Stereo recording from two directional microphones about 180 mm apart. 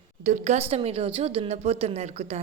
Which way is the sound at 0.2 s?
45° right (ahead or behind).